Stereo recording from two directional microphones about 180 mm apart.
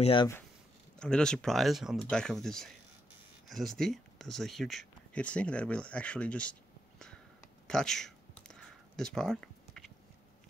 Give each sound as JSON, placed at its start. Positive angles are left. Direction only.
{"t": 0.0, "sound": "speech", "side_deg": 30}
{"t": 0.9, "sound": "speech", "side_deg": 5}
{"t": 7.6, "sound": "a sound", "side_deg": 5}